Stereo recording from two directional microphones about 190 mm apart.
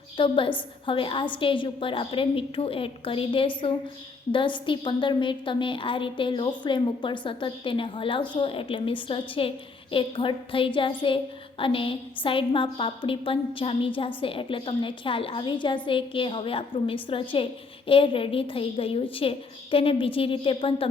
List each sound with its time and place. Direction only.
0.2 s a woman's voice: 25° left (ahead or behind)